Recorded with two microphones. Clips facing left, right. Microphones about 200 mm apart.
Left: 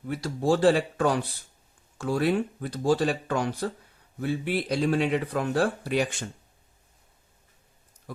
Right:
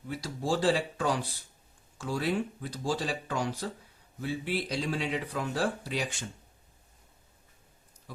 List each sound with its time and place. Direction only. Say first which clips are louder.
0.1 s speech: left 6 dB; 60° left (ahead or behind)